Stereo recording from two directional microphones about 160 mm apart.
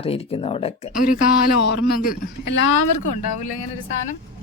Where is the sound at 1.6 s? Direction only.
80° left; by 2.3 s 65° left (ahead or behind).